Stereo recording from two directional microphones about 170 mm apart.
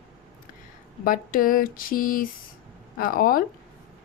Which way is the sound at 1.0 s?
55° left (ahead or behind).